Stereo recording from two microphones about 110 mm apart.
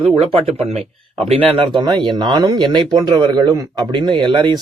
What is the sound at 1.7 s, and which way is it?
Speech, 45° right (ahead or behind).